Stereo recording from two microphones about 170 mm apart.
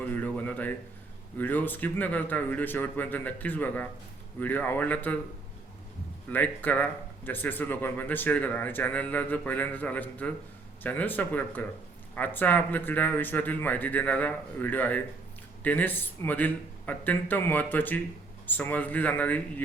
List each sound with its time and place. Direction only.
0.0 s a sound: 10° left (ahead or behind)
1.4 s speech: 10° left (ahead or behind)
6.3 s speech: 10° left (ahead or behind)